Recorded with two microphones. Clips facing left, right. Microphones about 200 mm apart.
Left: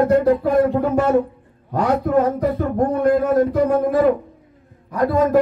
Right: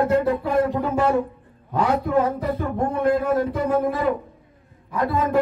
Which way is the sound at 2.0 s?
40° left (ahead or behind).